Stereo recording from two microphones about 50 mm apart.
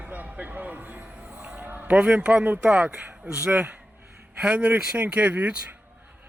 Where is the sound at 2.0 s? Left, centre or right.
Right.